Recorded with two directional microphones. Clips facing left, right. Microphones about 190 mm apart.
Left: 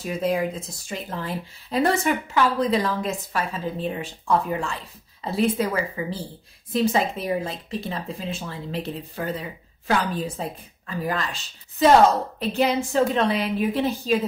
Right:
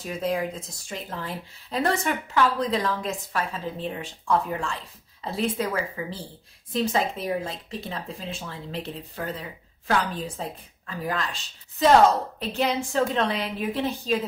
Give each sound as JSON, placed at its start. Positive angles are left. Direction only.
{"t": 0.0, "sound": "speech", "side_deg": 5}